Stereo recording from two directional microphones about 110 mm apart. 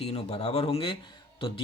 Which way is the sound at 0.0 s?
65° left (ahead or behind).